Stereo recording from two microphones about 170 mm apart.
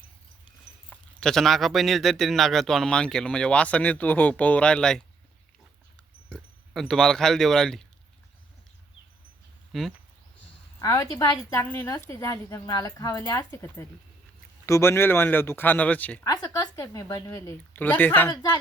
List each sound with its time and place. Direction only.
0.9 s speech: 5° left (ahead or behind)
6.2 s speech: 5° left (ahead or behind)
9.7 s speech: centre (ahead or behind)
10.8 s a woman's voice: 20° left (ahead or behind)
16.2 s a woman's voice: 20° left (ahead or behind)